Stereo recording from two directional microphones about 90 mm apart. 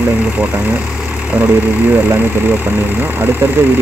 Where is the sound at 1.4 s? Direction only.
20° right (ahead or behind).